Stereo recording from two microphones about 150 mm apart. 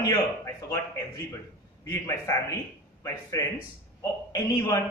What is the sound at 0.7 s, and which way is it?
A man's voice, 20° left (ahead or behind).